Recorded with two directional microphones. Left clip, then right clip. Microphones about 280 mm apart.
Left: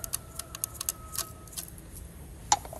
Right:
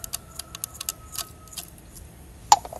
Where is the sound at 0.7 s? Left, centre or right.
Centre.